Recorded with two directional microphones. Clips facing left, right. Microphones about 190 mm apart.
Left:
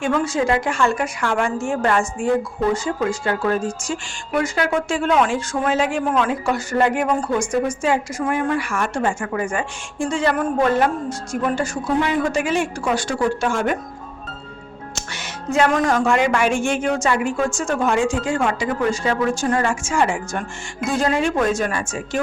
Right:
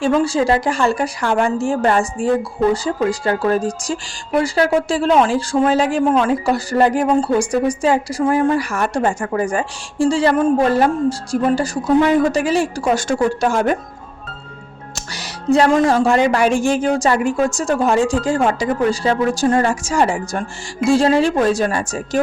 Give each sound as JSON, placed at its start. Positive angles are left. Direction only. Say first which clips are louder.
{"t": 0.0, "sound": "speech", "louder": "right 4 dB", "side_deg": -30}
{"t": 14.9, "sound": "speech", "louder": "right 2 dB", "side_deg": -35}